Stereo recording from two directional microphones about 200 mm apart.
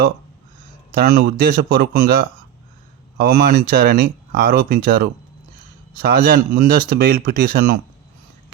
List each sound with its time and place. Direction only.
0.9 s speech: 45° right (ahead or behind)